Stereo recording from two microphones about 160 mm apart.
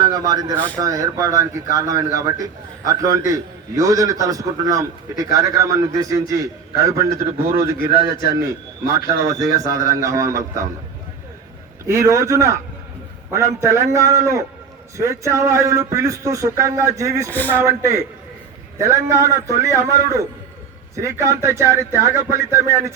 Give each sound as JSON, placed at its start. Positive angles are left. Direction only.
{"t": 0.0, "sound": "speech", "side_deg": -25}
{"t": 0.5, "sound": "speech", "side_deg": 10}
{"t": 0.8, "sound": "speech", "side_deg": -20}
{"t": 8.9, "sound": "speech", "side_deg": -20}
{"t": 11.9, "sound": "speech", "side_deg": -20}
{"t": 17.3, "sound": "speech", "side_deg": 10}
{"t": 17.6, "sound": "speech", "side_deg": -20}